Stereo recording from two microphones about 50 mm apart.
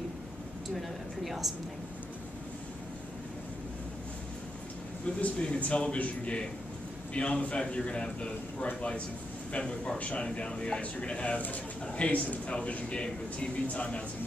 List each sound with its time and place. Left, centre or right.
0.7 s speech: centre
5.0 s a man's voice: left